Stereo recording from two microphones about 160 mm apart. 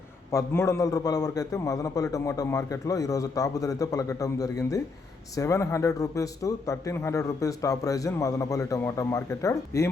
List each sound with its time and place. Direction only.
0.3 s speech: 20° left (ahead or behind)